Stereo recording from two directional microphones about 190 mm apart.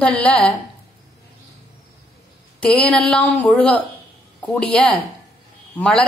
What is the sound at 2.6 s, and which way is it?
Speech, 5° left (ahead or behind).